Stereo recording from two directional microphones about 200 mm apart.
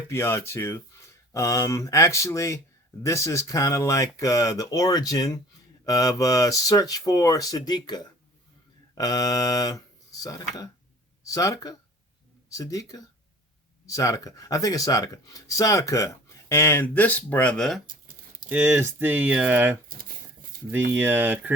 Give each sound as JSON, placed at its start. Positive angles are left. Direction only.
{"t": 0.1, "sound": "speech", "side_deg": 15}
{"t": 18.4, "sound": "speech", "side_deg": -10}